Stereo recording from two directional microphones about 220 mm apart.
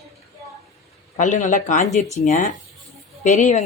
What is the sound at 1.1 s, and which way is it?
A woman's voice, 35° left (ahead or behind).